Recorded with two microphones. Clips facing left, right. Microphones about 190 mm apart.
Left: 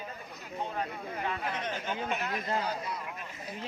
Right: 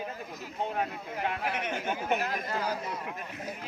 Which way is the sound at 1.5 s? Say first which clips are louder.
Right 2 dB; 10° right (ahead or behind).